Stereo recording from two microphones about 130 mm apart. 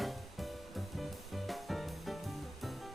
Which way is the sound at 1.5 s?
Centre (ahead or behind).